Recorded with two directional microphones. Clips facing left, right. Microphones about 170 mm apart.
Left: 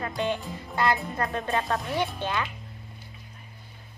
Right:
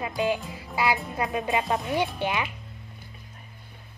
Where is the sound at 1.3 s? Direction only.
15° right (ahead or behind).